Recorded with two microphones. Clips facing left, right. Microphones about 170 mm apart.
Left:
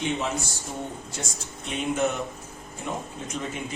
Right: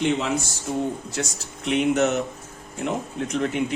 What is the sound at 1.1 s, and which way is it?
Speech, 75° right (ahead or behind).